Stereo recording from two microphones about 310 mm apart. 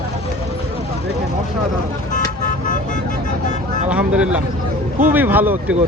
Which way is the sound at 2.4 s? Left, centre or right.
Left.